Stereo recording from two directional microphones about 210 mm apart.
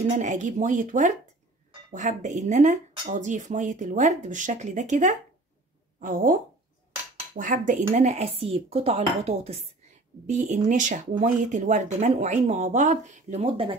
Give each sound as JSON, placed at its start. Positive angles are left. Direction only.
{"t": 0.1, "sound": "speech", "side_deg": -35}
{"t": 7.3, "sound": "speech", "side_deg": -40}